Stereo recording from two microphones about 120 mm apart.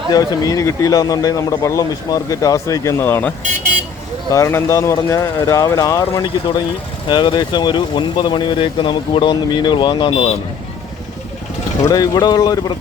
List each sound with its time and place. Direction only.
0.1 s speech: 30° left (ahead or behind)
11.9 s speech: 35° left (ahead or behind)